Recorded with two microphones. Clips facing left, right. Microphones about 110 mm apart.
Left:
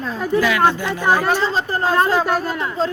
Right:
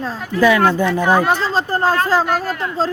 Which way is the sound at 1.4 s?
35° right (ahead or behind).